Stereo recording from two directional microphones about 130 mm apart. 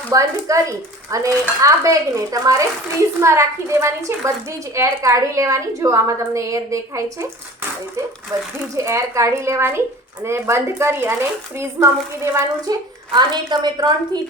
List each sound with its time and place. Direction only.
0.1 s dishes: 25° right (ahead or behind)
8.3 s dishes: 25° right (ahead or behind)
13.1 s a woman's voice: 35° right (ahead or behind)